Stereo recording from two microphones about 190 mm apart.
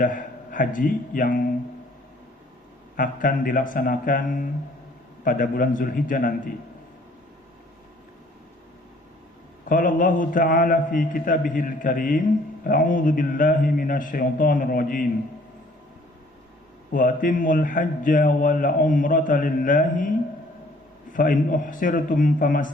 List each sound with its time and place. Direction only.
0.0 s a man's voice: 45° left (ahead or behind)
2.9 s a man's voice: 45° left (ahead or behind)
9.6 s a man's voice: 45° left (ahead or behind)
16.9 s a man's voice: 45° left (ahead or behind)
21.1 s a man's voice: 45° left (ahead or behind)